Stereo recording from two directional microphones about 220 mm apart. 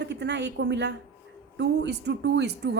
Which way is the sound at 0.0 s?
50° right (ahead or behind).